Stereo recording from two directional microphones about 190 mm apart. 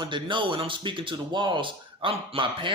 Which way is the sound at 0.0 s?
25° right (ahead or behind).